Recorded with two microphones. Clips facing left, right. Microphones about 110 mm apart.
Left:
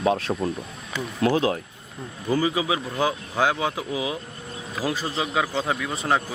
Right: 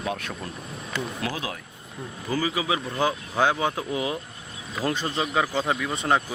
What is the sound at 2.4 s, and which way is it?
Speech, 20° left (ahead or behind).